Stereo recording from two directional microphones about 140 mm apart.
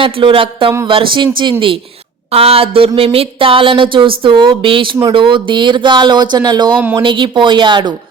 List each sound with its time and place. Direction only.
0.0 s speech: 40° right (ahead or behind)
6.7 s speech: 15° right (ahead or behind)
7.0 s speech: 35° right (ahead or behind)